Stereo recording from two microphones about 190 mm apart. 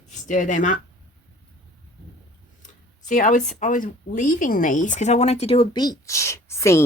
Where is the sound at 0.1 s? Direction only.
40° left (ahead or behind).